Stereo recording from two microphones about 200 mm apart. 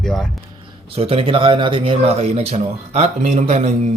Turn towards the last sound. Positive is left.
turn(degrees=-35)  # may be behind; listen again after turning